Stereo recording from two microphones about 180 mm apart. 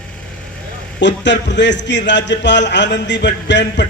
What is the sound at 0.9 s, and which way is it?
A man's voice, 80° left.